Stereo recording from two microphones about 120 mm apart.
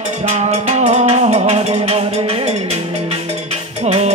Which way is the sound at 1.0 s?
65° right (ahead or behind).